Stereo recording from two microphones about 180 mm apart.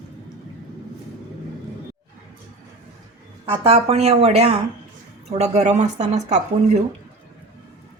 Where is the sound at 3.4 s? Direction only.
30° right (ahead or behind).